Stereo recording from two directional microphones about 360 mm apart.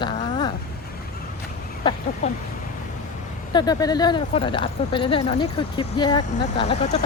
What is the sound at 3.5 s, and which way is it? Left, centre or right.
Speech, centre.